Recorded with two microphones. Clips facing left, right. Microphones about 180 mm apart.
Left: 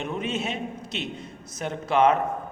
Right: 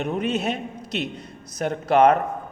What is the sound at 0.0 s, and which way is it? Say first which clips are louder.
A man's voice: right 5 dB; 40° right (ahead or behind).